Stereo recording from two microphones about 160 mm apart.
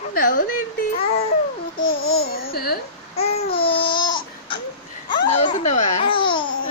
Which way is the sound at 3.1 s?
40° left (ahead or behind).